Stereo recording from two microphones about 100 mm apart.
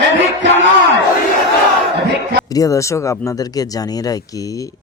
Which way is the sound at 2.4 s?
35° left (ahead or behind).